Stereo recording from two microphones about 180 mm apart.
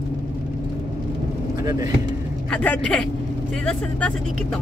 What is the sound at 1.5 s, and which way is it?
Speech, 20° right (ahead or behind).